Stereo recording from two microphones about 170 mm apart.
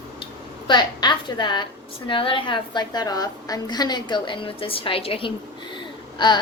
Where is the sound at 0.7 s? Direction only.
25° left (ahead or behind).